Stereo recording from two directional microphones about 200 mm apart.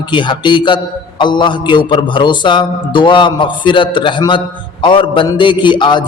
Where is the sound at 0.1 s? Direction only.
25° left (ahead or behind).